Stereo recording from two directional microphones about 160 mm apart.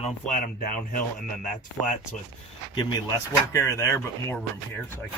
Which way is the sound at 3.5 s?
20° left (ahead or behind).